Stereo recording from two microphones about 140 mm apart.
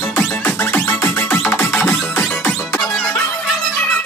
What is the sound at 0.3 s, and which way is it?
Music, 10° left (ahead or behind).